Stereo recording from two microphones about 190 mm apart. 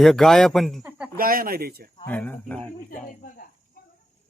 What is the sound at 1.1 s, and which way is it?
Speech, 50° right (ahead or behind).